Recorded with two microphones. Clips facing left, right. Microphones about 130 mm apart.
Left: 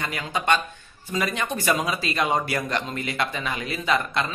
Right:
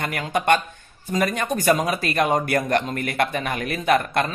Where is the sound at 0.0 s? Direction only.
55° right (ahead or behind).